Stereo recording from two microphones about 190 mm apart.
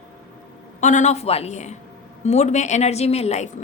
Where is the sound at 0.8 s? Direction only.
40° left (ahead or behind).